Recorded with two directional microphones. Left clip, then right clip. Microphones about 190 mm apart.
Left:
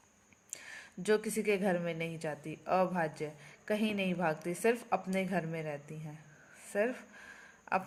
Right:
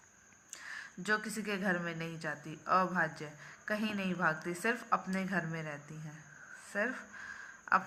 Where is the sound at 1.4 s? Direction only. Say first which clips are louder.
Left 4 dB; 35° left (ahead or behind).